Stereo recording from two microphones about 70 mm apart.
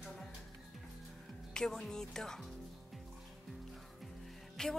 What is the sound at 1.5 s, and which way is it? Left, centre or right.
Speech, centre.